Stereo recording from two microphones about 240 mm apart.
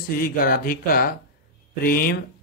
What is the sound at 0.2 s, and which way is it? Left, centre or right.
Speech, left.